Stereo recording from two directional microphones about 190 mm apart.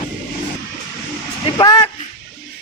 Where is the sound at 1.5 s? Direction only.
20° left (ahead or behind).